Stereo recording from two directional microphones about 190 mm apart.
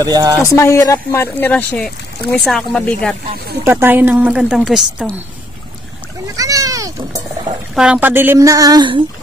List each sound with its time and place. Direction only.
0.0 s a woman's voice: 20° right (ahead or behind)
0.5 s speech: 15° left (ahead or behind)
3.6 s a woman's voice: 10° right (ahead or behind)
6.3 s speech: 20° right (ahead or behind)
7.7 s a woman's voice: 5° right (ahead or behind); by 9.0 s 25° right (ahead or behind)